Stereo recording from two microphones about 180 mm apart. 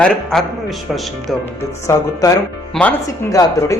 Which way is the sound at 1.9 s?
15° left (ahead or behind).